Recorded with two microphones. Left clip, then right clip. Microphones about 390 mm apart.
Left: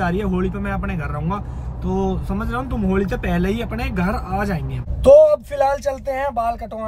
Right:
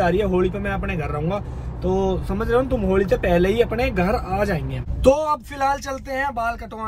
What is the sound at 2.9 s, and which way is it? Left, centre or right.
Speech, centre.